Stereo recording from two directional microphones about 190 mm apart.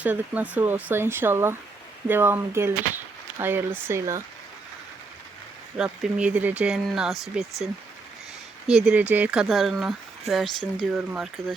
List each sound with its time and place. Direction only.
0.0 s speech: 10° right (ahead or behind)
5.7 s speech: 5° right (ahead or behind)